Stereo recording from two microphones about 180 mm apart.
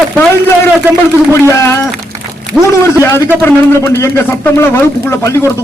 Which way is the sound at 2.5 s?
Centre (ahead or behind).